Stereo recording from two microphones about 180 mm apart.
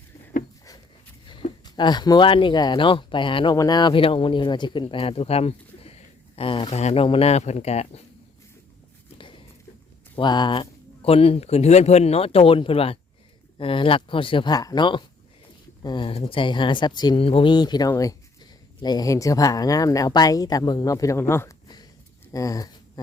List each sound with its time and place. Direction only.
1.3 s speech: 25° left (ahead or behind)
10.2 s speech: 25° left (ahead or behind)